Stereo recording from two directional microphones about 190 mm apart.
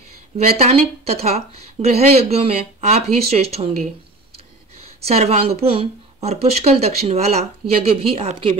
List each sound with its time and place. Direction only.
0.6 s speech: 35° right (ahead or behind)
4.7 s speech: 30° right (ahead or behind)